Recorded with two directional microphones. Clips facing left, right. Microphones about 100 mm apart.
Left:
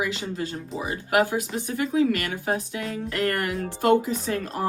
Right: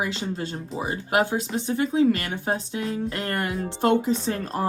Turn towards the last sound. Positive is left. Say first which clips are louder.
# right 1 dB
turn(degrees=-30)  # may be behind; listen again after turning